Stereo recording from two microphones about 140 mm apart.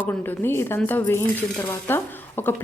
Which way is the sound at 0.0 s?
15° left (ahead or behind).